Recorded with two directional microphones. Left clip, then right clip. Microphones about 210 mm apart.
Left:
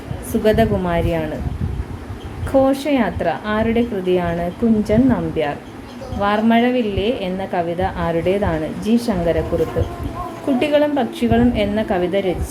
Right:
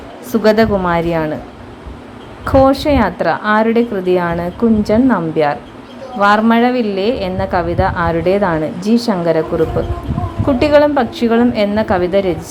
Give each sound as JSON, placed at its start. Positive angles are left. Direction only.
{"t": 0.3, "sound": "a woman's voice", "side_deg": -20}
{"t": 2.5, "sound": "a woman's voice", "side_deg": -20}
{"t": 10.6, "sound": "a woman's voice", "side_deg": -20}